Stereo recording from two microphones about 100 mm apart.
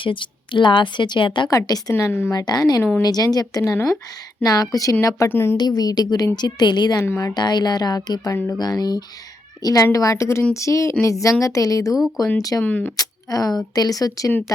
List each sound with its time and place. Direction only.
0.0 s a woman's voice: 55° left (ahead or behind)
1.5 s a woman's voice: 40° left (ahead or behind)
2.3 s a woman's voice: 45° left (ahead or behind)
5.3 s a woman's voice: 25° left (ahead or behind)
5.5 s a woman's voice: 40° left (ahead or behind)
11.9 s speech: 5° right (ahead or behind)
12.5 s speech: 15° left (ahead or behind)
13.0 s a woman's voice: 40° left (ahead or behind)